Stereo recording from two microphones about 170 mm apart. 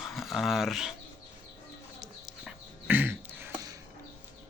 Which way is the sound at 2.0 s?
Centre (ahead or behind).